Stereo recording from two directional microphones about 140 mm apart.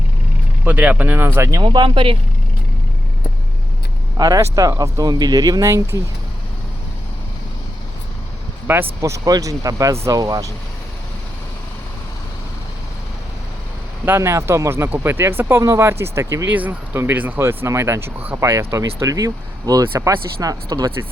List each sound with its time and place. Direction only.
0.6 s speech: 10° right (ahead or behind)
1.6 s speech: 35° right (ahead or behind)
4.2 s speech: 25° right (ahead or behind)
8.6 s speech: 15° right (ahead or behind)
14.0 s speech: 15° right (ahead or behind)